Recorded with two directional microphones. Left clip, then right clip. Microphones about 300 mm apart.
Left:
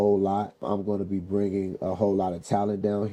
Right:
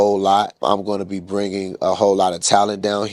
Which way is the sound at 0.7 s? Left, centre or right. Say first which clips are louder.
Right 8 dB; centre.